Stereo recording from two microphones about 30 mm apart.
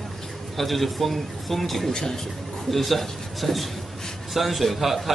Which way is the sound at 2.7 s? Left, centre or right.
Centre.